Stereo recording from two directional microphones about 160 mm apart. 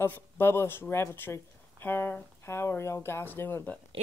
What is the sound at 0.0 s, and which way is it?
Speech, 15° left (ahead or behind).